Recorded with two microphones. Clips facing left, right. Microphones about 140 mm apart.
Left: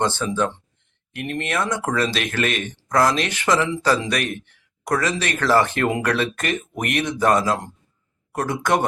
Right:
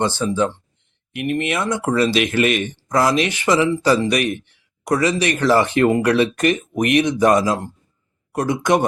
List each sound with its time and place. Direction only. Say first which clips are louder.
0.0 s speech: right 3 dB; 10° right (ahead or behind)